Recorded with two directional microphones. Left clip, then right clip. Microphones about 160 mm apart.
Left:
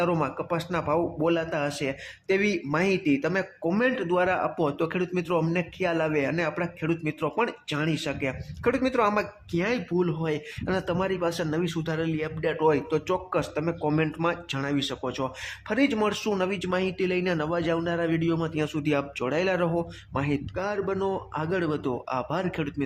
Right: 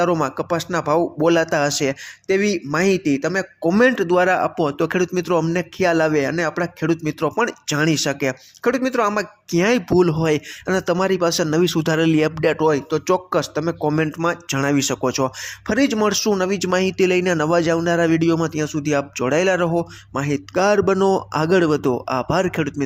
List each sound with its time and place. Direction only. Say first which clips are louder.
0.0 s speech: right 7 dB; 25° right (ahead or behind)
2.2 s speech: right 6 dB; 20° right (ahead or behind)
3.8 s speech: right 9 dB; 45° right (ahead or behind); by 9.6 s 25° right (ahead or behind)
9.6 s speech: right 10 dB; 45° right (ahead or behind)
10.7 s speech: right 8 dB; 25° right (ahead or behind)
10.9 s speech: right 9 dB; 40° right (ahead or behind)
12.6 s speech: right 6 dB; 25° right (ahead or behind); by 15.3 s 40° right (ahead or behind)
15.4 s speech: right 6 dB; 25° right (ahead or behind)
18.3 s speech: right 7 dB; 25° right (ahead or behind)
20.6 s speech: right 14 dB; 45° right (ahead or behind)